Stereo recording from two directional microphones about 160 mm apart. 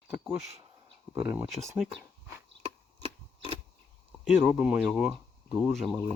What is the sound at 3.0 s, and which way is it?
Scissors, 35° right (ahead or behind).